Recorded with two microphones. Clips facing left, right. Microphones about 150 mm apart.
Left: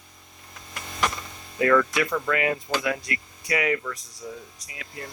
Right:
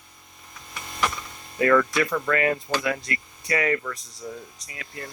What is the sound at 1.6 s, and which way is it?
Speech, 5° left (ahead or behind).